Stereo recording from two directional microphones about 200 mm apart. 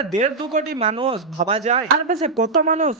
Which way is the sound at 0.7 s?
25° right (ahead or behind).